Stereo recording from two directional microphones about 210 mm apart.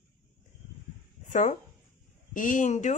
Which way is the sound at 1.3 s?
35° left (ahead or behind).